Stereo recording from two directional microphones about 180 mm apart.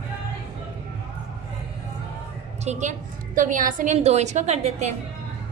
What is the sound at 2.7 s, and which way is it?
A woman's voice, 40° right (ahead or behind).